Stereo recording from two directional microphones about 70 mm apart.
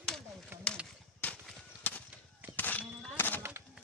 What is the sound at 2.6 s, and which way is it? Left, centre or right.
Chink, left.